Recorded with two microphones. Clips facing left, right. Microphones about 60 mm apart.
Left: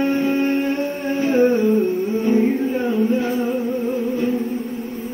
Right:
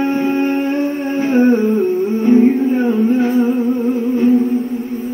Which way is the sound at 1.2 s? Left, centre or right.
Right.